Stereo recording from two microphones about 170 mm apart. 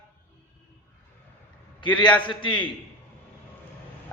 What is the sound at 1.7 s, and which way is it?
Speech, 25° left (ahead or behind).